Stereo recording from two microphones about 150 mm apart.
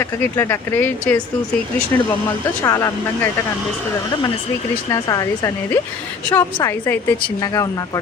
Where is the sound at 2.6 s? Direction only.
20° left (ahead or behind).